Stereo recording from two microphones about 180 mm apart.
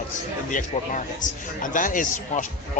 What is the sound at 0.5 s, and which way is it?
A man's voice, 45° left (ahead or behind).